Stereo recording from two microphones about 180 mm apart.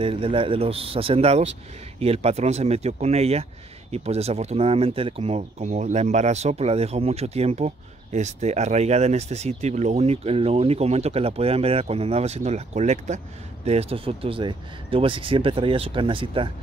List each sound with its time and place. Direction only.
0.0 s speech: 30° right (ahead or behind)